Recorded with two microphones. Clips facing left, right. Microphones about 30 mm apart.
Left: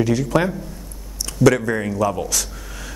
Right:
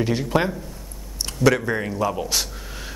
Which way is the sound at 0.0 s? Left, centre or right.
Right.